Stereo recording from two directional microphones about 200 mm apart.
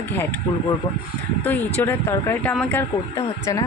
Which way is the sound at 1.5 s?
10° left (ahead or behind).